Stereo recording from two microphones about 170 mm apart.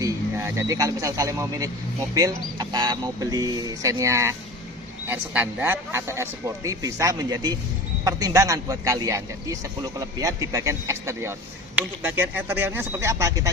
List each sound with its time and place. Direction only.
0.0 s a man's voice: 15° right (ahead or behind)